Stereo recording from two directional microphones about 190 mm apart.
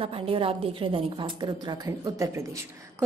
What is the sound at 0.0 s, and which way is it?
A woman's voice, 30° right (ahead or behind).